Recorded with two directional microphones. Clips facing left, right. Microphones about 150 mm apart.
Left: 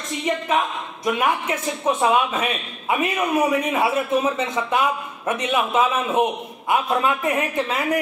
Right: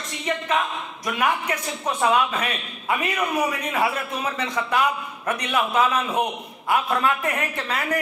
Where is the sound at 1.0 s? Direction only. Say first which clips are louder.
Left 2 dB; 25° left (ahead or behind).